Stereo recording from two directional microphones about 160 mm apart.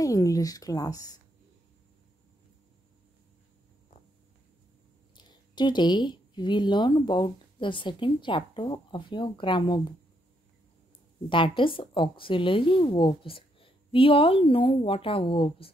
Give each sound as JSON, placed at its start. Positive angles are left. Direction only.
{"t": 0.0, "sound": "speech", "side_deg": 20}
{"t": 5.1, "sound": "speech", "side_deg": 30}
{"t": 11.2, "sound": "a woman's voice", "side_deg": 30}